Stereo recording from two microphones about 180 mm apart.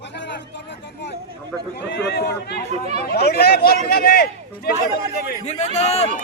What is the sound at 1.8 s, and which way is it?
Speech, 65° left (ahead or behind).